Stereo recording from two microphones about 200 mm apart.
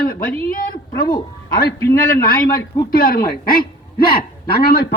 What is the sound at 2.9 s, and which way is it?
A woman's voice, 45° left (ahead or behind).